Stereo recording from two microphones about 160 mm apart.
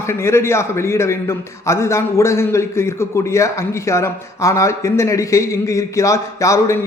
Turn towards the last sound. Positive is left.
turn(degrees=20)  # may be behind; listen again after turning